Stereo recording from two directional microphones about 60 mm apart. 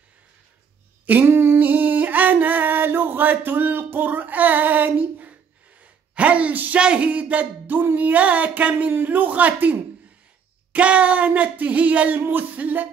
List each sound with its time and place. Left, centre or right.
1.2 s music: right
6.1 s a sound: right
6.8 s music: centre
12.2 s speech: right